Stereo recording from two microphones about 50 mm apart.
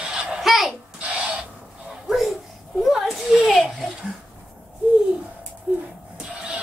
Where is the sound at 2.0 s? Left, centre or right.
Centre.